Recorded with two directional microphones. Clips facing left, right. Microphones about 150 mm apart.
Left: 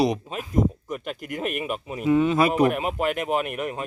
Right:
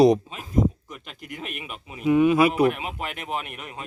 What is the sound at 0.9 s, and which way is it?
Speech, 50° left (ahead or behind).